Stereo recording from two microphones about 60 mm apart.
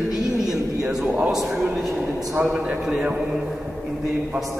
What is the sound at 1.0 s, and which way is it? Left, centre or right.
Speech, right.